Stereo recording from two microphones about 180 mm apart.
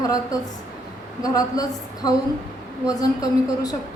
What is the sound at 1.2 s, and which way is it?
Speech, 20° left (ahead or behind).